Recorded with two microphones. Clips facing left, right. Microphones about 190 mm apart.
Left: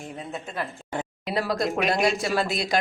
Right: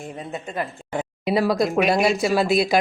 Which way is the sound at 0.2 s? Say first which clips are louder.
Right 3 dB; centre (ahead or behind).